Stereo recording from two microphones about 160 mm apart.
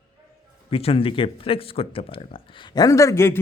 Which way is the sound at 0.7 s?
35° left (ahead or behind).